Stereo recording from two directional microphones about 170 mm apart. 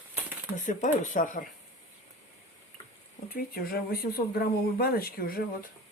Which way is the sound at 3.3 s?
65° left (ahead or behind).